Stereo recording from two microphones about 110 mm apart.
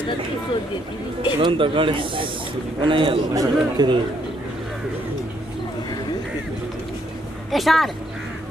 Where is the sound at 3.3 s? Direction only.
35° right (ahead or behind).